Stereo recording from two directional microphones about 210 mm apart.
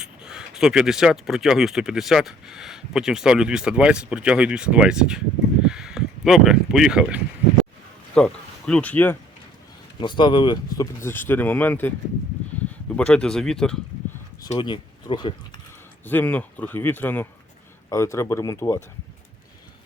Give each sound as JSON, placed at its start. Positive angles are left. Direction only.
{"t": 0.0, "sound": "speech", "side_deg": -5}
{"t": 10.0, "sound": "speech", "side_deg": 20}
{"t": 13.0, "sound": "speech", "side_deg": 5}
{"t": 14.5, "sound": "speech", "side_deg": 20}
{"t": 16.0, "sound": "speech", "side_deg": 10}